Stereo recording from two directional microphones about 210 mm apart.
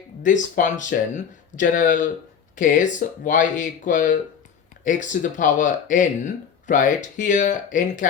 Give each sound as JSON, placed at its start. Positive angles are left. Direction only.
{"t": 0.2, "sound": "speech", "side_deg": 35}